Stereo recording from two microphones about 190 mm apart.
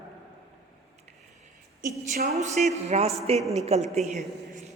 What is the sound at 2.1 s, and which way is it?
A woman's voice, 40° right (ahead or behind).